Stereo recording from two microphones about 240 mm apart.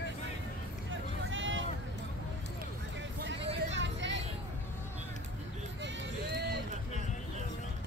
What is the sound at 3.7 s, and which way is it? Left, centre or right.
Vehicle, right.